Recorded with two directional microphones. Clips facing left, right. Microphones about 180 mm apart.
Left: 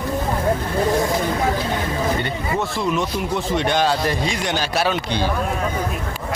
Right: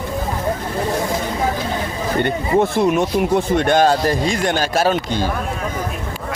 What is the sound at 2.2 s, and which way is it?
Speech, 50° right (ahead or behind).